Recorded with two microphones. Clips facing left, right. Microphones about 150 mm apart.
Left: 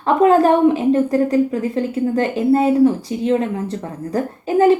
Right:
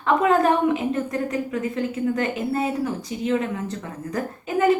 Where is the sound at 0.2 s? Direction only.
35° left (ahead or behind).